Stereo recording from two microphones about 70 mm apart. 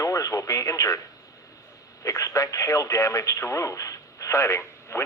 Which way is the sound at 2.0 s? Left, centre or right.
Left.